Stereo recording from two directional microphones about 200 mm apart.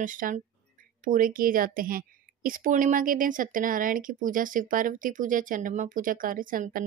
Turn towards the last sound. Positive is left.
turn(degrees=-45)  # may be behind; listen again after turning